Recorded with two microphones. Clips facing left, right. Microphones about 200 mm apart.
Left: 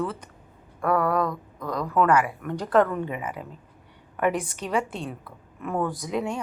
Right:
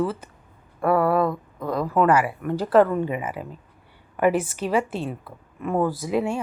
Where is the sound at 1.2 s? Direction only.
30° right (ahead or behind).